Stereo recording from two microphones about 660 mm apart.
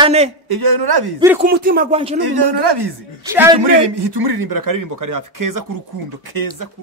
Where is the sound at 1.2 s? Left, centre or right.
Centre.